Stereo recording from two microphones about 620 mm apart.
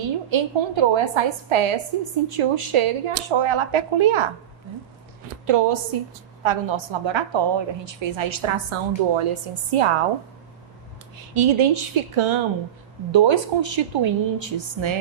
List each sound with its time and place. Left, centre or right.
0.3 s a woman's voice: right
5.5 s a woman's voice: right
11.3 s a woman's voice: right